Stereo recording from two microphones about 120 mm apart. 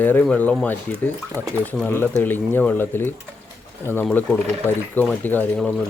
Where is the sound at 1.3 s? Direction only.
25° right (ahead or behind).